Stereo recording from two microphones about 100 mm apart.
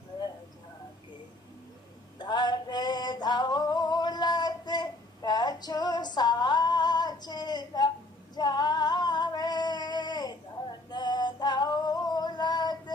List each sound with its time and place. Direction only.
2.1 s music: 45° left (ahead or behind)
8.4 s female singing: 45° left (ahead or behind)
10.9 s music: 45° left (ahead or behind)